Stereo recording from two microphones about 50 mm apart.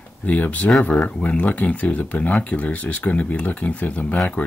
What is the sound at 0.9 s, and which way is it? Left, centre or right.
Speech, centre.